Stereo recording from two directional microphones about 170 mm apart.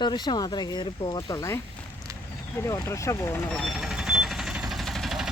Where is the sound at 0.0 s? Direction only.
25° left (ahead or behind).